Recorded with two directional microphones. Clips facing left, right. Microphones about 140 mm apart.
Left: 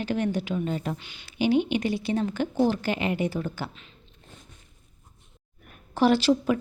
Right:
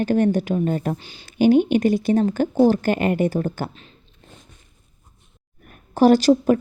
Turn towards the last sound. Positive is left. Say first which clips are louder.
# right 7 dB
turn(degrees=-45)  # may be behind; listen again after turning